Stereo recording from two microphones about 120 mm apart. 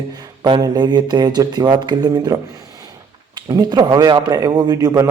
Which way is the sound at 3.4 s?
35° right (ahead or behind).